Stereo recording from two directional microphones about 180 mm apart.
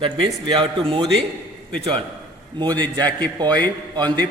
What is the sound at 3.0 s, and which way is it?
Speech, 10° left (ahead or behind).